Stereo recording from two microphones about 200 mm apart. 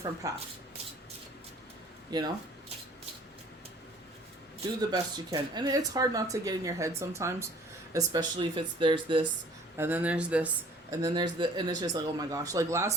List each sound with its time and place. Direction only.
0.0 s speech: 15° right (ahead or behind)
2.0 s speech: 20° right (ahead or behind)
4.8 s speech: 20° right (ahead or behind)
9.7 s speech: 10° right (ahead or behind)
11.0 s speech: 20° right (ahead or behind)